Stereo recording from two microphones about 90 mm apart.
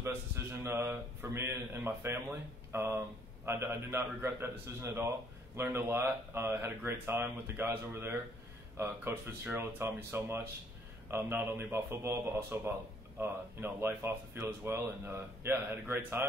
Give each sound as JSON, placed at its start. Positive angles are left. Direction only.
{"t": 0.0, "sound": "a man's voice", "side_deg": -25}